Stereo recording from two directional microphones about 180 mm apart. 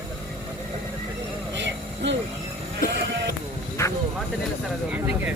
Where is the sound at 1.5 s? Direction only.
80° right.